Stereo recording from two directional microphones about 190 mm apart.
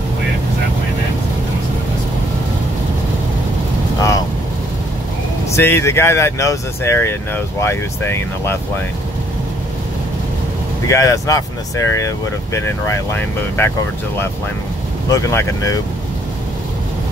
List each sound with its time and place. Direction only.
5.6 s speech: 15° left (ahead or behind)
10.9 s speech: 15° left (ahead or behind)
15.0 s speech: 15° left (ahead or behind)